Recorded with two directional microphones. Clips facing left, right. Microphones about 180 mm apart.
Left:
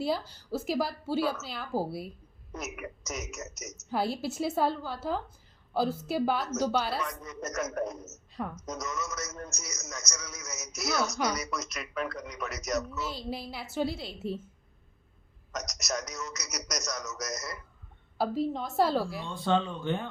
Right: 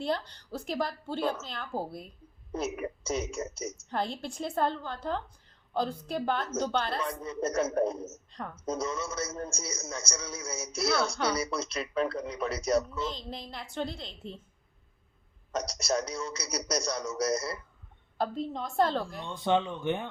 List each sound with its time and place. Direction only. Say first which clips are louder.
0.0 s a woman's voice: left 1 dB; 5° left (ahead or behind)
2.5 s a man's voice: right 6 dB; 30° right (ahead or behind)
3.8 s a woman's voice: left 4 dB; 5° left (ahead or behind)
7.0 s a man's voice: right 4 dB; 30° right (ahead or behind)
8.3 s a sound: left 4 dB; 5° left (ahead or behind)
8.5 s a man's voice: right 4 dB; 30° right (ahead or behind)
13.0 s a child's voice: even; 10° left (ahead or behind)
15.5 s a man's voice: right 5 dB; 30° right (ahead or behind)
18.2 s a woman's voice: left 3 dB; 5° left (ahead or behind)
19.2 s speech: right 1 dB; 20° right (ahead or behind)